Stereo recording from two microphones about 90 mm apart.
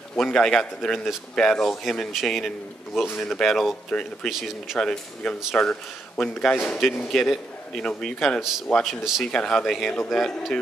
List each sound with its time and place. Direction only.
0.2 s a man's voice: 5° left (ahead or behind)
3.9 s speech: 10° left (ahead or behind)
4.3 s a man's voice: 5° right (ahead or behind)
4.7 s a man's voice: 10° left (ahead or behind)
8.4 s a man's voice: 5° right (ahead or behind)
9.3 s speech: 10° left (ahead or behind)